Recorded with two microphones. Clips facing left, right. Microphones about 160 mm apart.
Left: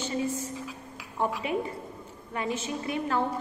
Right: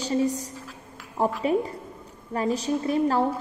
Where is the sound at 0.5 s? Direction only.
5° left (ahead or behind).